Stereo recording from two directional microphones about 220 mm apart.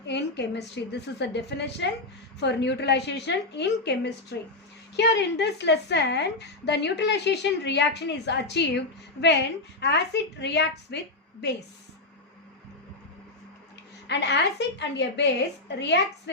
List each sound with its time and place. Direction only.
0.1 s a woman's voice: 50° left (ahead or behind)
9.8 s a woman's voice: 50° left (ahead or behind)
14.1 s a woman's voice: 50° left (ahead or behind)